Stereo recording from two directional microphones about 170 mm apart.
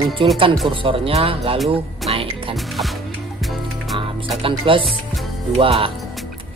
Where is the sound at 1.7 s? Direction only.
35° right (ahead or behind).